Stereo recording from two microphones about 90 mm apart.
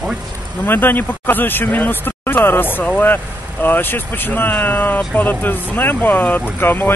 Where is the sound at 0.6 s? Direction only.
25° left (ahead or behind).